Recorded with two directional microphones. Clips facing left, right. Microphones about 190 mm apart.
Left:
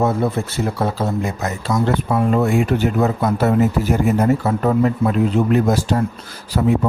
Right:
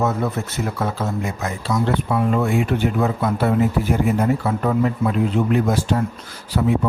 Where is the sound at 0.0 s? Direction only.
30° left (ahead or behind).